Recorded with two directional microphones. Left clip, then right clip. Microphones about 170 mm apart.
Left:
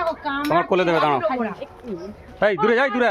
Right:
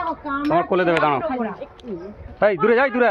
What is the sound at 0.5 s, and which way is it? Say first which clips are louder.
Speech: even; 25° left (ahead or behind).